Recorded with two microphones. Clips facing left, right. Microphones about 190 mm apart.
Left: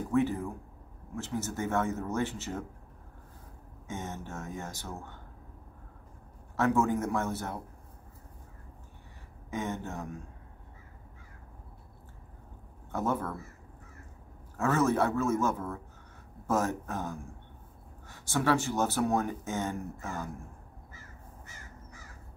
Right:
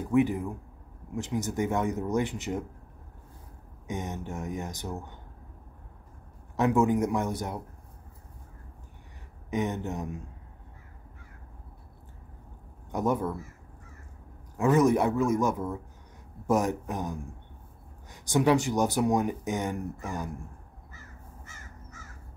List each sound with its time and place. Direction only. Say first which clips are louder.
0.1 s speech: right 4 dB; 15° right (ahead or behind)
3.8 s speech: right 4 dB; 15° right (ahead or behind)
6.5 s speech: right 3 dB; 15° right (ahead or behind)
9.5 s speech: right 5 dB; 20° right (ahead or behind)
12.9 s speech: right 4 dB; 15° right (ahead or behind)
14.6 s speech: right 4 dB; 15° right (ahead or behind)